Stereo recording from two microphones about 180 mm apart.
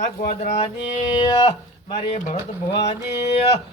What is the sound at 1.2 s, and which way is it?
Speech, 25° left (ahead or behind).